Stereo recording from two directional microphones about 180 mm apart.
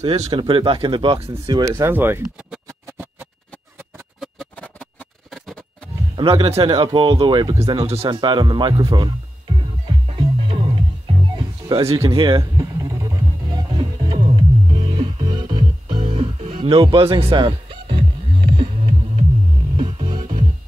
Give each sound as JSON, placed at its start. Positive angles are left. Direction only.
{"t": 0.0, "sound": "speech", "side_deg": -35}
{"t": 1.4, "sound": "a sound", "side_deg": -20}
{"t": 4.2, "sound": "music", "side_deg": 5}
{"t": 6.1, "sound": "speech", "side_deg": -30}
{"t": 7.8, "sound": "speech", "side_deg": -35}
{"t": 9.6, "sound": "music", "side_deg": -30}
{"t": 20.1, "sound": "music", "side_deg": -45}